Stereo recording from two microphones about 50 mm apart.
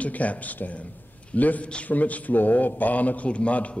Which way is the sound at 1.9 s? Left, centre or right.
Left.